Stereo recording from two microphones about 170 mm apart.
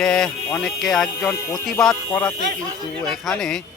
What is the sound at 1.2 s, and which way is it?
Speech, 15° left (ahead or behind).